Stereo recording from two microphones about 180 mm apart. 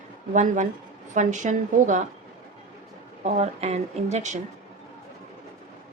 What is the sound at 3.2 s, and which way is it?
Speech, 40° right (ahead or behind).